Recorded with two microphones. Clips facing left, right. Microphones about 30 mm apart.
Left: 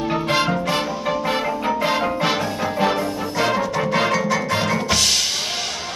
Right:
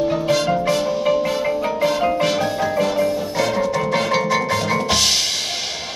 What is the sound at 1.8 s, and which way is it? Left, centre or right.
Music, left.